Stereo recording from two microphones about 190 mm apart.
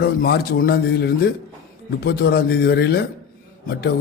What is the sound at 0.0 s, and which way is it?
A man's voice, 55° left (ahead or behind).